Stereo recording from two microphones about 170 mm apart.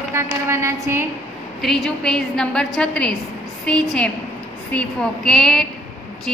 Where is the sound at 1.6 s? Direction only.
5° left (ahead or behind).